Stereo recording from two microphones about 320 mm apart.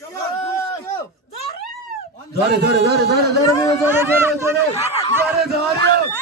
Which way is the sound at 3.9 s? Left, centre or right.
Centre.